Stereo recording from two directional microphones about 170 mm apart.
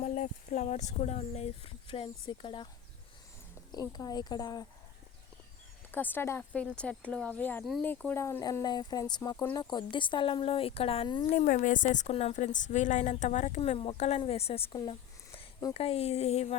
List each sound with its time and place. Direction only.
0.0 s speech: 50° left (ahead or behind); by 2.6 s 30° left (ahead or behind)
3.7 s speech: 25° left (ahead or behind)
5.9 s speech: 10° left (ahead or behind); by 11.3 s 30° left (ahead or behind)
11.3 s a woman's voice: 50° left (ahead or behind)